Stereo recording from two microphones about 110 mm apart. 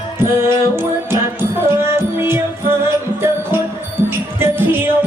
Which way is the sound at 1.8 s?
25° right (ahead or behind).